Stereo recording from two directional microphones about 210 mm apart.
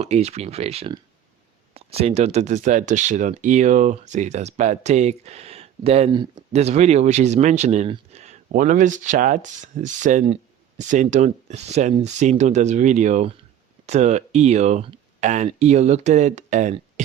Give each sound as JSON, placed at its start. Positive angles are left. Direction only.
{"t": 0.0, "sound": "speech", "side_deg": -30}